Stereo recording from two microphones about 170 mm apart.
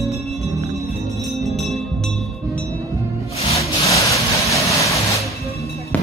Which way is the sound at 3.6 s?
20° left (ahead or behind).